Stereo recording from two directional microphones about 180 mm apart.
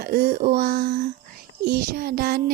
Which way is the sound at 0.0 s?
55° right (ahead or behind).